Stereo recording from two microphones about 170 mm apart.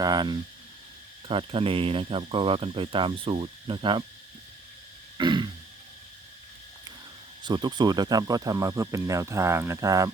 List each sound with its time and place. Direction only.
0.0 s speech: 25° right (ahead or behind)
5.1 s throat clearing: 25° right (ahead or behind)
7.4 s speech: 25° right (ahead or behind)